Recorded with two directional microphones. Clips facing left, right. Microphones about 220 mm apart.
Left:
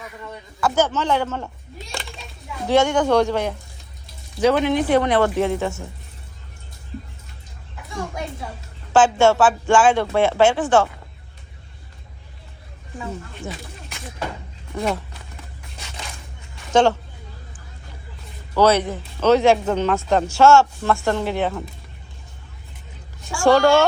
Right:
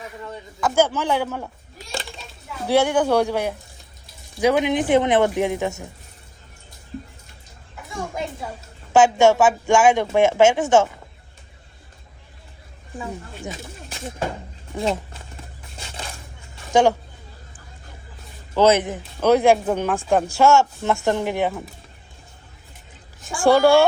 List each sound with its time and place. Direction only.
0.6 s speech: 10° right (ahead or behind)
2.6 s speech: 10° right (ahead or behind)
7.8 s a sound: centre (ahead or behind)
8.9 s speech: 15° right (ahead or behind)
13.0 s speech: 15° right (ahead or behind)
15.8 s a sound: 35° right (ahead or behind)
16.7 s speech: 15° right (ahead or behind)
18.5 s speech: 20° right (ahead or behind)
23.3 s speech: 15° right (ahead or behind)